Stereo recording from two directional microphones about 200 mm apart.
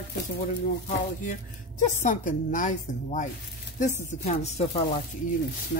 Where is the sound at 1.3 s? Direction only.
40° left (ahead or behind).